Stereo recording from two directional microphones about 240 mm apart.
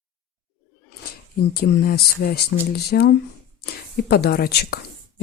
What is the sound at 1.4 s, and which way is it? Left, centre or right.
Speech, left.